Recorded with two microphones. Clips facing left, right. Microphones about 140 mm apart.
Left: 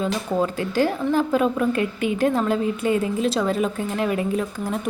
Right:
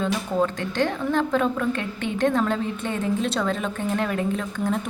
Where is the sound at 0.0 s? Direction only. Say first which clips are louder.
Left 1 dB; 5° left (ahead or behind).